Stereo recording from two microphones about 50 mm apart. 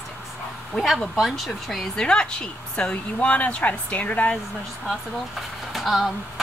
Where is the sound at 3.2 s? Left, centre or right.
Left.